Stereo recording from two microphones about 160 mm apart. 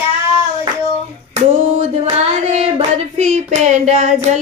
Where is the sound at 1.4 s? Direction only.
45° right (ahead or behind).